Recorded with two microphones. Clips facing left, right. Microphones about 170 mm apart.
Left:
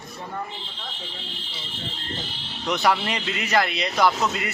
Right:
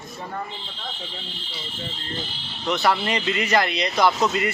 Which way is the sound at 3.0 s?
Centre (ahead or behind).